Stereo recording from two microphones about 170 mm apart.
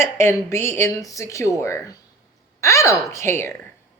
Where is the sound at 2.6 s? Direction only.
20° left (ahead or behind).